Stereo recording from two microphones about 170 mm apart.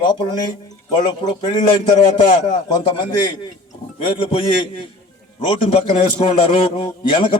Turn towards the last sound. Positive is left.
turn(degrees=30)  # may be behind; listen again after turning